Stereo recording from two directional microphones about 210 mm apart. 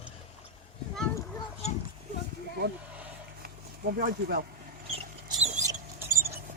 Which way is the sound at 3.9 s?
45° right (ahead or behind).